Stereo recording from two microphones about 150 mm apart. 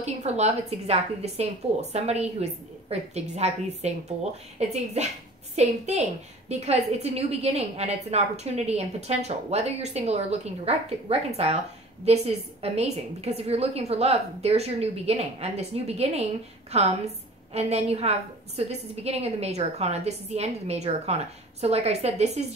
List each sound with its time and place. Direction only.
0.0 s a woman's voice: 50° right (ahead or behind)